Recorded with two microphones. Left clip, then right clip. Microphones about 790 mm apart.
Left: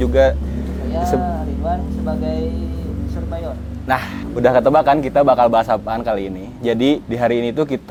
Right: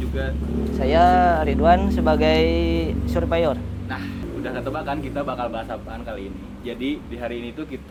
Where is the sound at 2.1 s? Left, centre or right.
Right.